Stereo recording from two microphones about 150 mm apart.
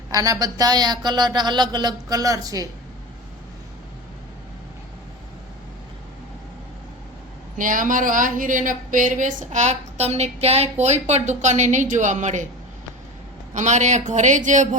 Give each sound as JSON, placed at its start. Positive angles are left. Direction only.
{"t": 0.1, "sound": "speech", "side_deg": -25}
{"t": 7.6, "sound": "a woman's voice", "side_deg": -60}
{"t": 13.5, "sound": "a man's voice", "side_deg": -50}